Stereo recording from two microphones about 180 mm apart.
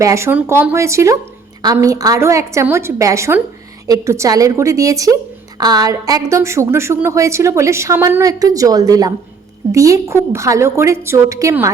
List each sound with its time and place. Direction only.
0.0 s a woman's voice: 15° right (ahead or behind)